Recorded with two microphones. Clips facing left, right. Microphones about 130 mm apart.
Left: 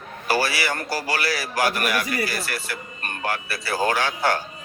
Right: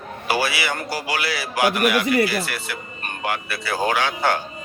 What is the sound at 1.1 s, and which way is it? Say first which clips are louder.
A man's voice: even; 40° left (ahead or behind).